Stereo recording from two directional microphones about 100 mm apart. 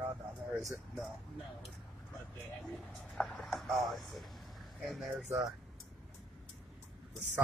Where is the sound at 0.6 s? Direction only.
Centre (ahead or behind).